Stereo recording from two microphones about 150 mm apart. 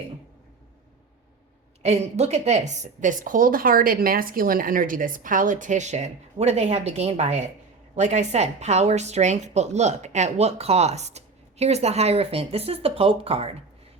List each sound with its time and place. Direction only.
1.8 s a woman's voice: 45° right (ahead or behind)